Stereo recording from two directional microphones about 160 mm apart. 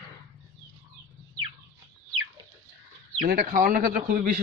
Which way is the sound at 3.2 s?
60° right (ahead or behind).